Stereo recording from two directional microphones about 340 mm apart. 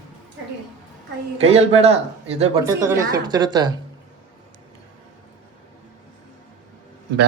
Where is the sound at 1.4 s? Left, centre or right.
Centre.